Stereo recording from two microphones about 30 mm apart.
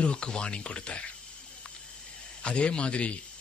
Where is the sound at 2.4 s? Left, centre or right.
Left.